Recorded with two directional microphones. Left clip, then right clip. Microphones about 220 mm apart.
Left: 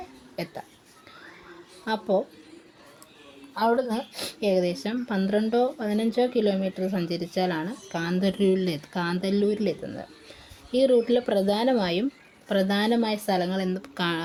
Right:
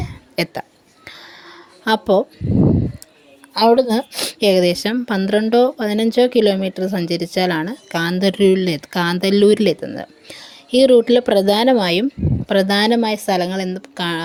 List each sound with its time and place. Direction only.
0.4 s speech: 35° right (ahead or behind)
1.0 s a sound: 35° right (ahead or behind)
3.6 s speech: 45° right (ahead or behind); by 14.2 s 20° right (ahead or behind)